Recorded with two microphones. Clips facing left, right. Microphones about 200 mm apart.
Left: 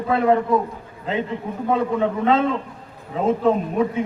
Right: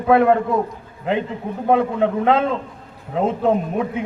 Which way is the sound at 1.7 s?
60° right (ahead or behind).